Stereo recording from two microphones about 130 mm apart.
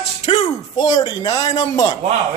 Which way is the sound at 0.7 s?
30° left (ahead or behind).